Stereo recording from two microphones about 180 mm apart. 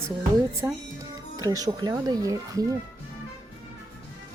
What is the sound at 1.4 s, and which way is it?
Music, 20° right (ahead or behind).